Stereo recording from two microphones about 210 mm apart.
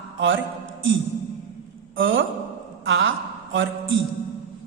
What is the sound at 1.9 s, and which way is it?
Speech, 65° right (ahead or behind).